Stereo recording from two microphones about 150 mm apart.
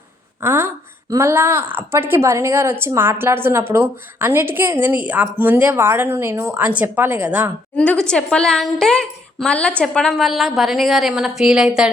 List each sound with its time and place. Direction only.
0.4 s a woman's voice: 15° right (ahead or behind)
7.8 s a woman's voice: 5° left (ahead or behind)